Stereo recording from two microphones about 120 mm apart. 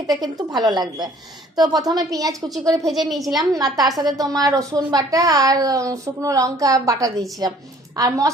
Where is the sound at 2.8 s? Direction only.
Centre (ahead or behind).